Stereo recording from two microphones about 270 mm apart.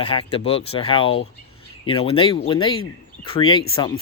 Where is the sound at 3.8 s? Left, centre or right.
Centre.